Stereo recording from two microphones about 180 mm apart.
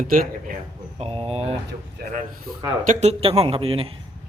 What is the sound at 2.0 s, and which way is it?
Speech, 55° right (ahead or behind).